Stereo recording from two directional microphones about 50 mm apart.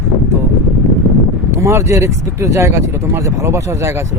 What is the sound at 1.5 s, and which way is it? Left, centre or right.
Speech, right.